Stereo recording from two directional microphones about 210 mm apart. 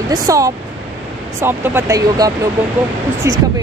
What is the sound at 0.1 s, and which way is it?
Speech, 15° right (ahead or behind).